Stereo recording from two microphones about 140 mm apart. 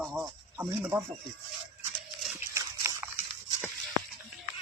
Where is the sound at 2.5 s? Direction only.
20° right (ahead or behind).